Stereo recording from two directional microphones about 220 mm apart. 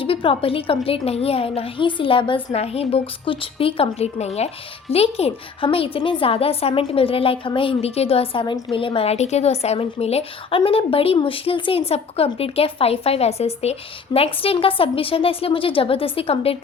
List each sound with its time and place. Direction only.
0.0 s a woman's voice: 25° left (ahead or behind)